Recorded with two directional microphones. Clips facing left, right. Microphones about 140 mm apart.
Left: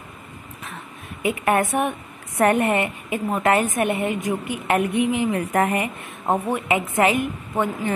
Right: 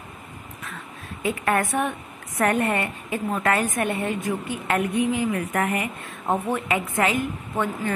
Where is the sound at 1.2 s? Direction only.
20° left (ahead or behind).